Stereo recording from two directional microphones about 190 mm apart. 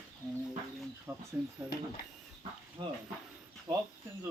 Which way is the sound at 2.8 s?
25° right (ahead or behind).